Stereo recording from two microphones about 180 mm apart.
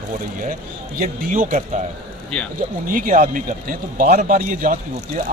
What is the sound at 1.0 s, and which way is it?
Speech, 45° right (ahead or behind).